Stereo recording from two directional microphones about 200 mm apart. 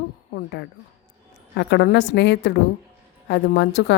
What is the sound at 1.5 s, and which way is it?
A woman's voice, 55° left (ahead or behind).